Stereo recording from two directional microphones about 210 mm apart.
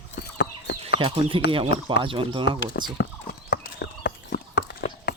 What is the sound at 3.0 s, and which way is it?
Horse, 50° left (ahead or behind).